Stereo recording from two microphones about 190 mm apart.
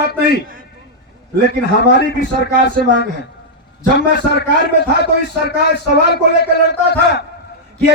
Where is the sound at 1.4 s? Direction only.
65° left (ahead or behind).